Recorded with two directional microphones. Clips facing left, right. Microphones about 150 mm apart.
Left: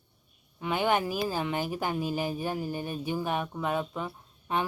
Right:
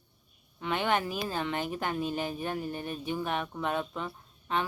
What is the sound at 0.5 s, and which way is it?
Speech, 10° left (ahead or behind).